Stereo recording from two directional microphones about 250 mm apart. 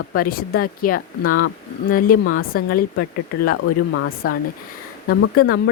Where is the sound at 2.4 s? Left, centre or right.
Left.